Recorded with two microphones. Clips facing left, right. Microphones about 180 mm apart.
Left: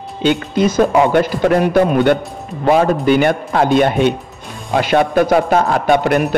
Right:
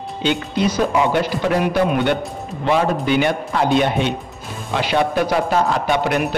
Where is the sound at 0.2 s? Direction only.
50° left (ahead or behind).